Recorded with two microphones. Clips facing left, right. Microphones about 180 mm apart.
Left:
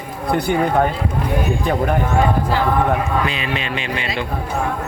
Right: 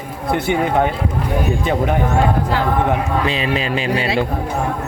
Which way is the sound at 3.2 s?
35° right (ahead or behind).